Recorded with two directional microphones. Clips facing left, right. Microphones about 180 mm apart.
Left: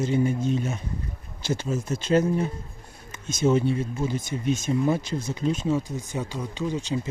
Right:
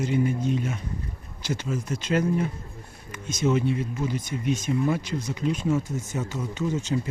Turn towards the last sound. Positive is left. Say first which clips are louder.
# right 1 dB
turn(degrees=15)  # may be behind; listen again after turning